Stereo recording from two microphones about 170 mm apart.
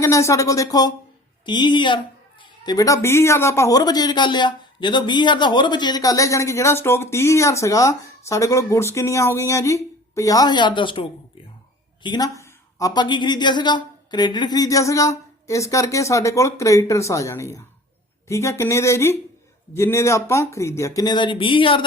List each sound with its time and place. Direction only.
0.0 s speech: 15° left (ahead or behind)
12.0 s speech: 25° left (ahead or behind)